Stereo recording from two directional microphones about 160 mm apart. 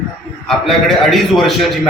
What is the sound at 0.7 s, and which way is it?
Speech, centre (ahead or behind).